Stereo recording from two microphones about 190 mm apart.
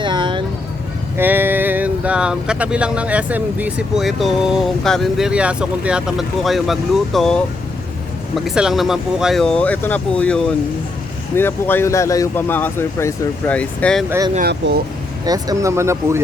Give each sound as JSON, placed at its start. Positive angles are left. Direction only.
{"t": 0.0, "sound": "vehicle", "side_deg": -25}
{"t": 1.1, "sound": "speech", "side_deg": -10}
{"t": 8.4, "sound": "speech", "side_deg": 0}
{"t": 14.6, "sound": "speech", "side_deg": -65}
{"t": 15.2, "sound": "speech", "side_deg": -20}